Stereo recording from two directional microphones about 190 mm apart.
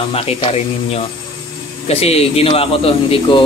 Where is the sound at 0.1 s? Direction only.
30° left (ahead or behind).